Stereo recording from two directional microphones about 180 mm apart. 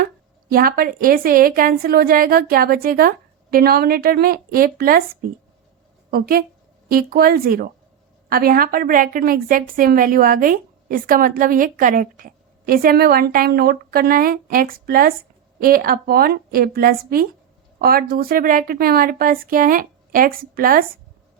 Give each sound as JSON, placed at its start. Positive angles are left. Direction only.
{"t": 0.5, "sound": "a woman's voice", "side_deg": -55}
{"t": 6.1, "sound": "a woman's voice", "side_deg": -55}